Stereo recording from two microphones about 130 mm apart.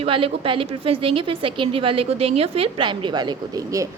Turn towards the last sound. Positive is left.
turn(degrees=-25)  # may be behind; listen again after turning